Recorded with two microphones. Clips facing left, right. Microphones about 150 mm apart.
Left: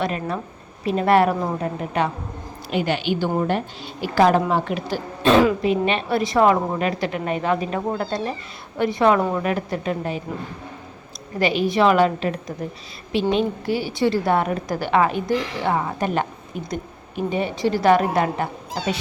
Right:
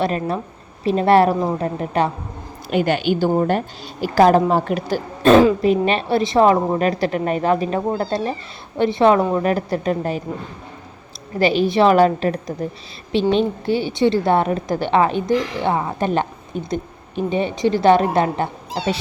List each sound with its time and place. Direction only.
0.0 s a woman's voice: 35° right (ahead or behind)
2.6 s a woman's voice: 50° right (ahead or behind)
11.3 s a woman's voice: 30° right (ahead or behind)
13.1 s a woman's voice: 30° right (ahead or behind)